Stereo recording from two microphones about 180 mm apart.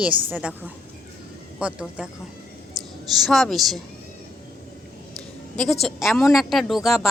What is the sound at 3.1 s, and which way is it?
Speech, centre (ahead or behind).